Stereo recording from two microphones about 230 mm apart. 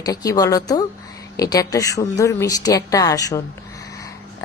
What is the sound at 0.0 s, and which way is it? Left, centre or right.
A woman's voice, centre.